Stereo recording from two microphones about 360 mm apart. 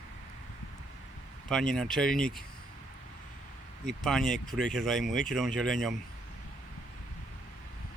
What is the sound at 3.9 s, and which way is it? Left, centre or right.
Speech, centre.